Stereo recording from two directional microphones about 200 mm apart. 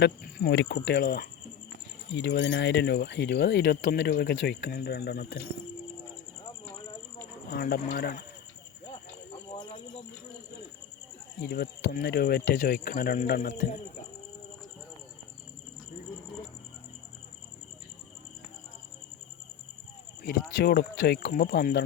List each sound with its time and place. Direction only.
0.0 s speech: 50° left (ahead or behind)
2.1 s speech: 60° left (ahead or behind)
7.5 s speech: 50° left (ahead or behind)
8.9 s clip-clop: 25° left (ahead or behind)
11.4 s speech: 50° left (ahead or behind)
20.2 s speech: 55° left (ahead or behind)